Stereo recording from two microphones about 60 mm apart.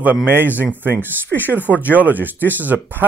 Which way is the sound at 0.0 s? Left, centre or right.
Right.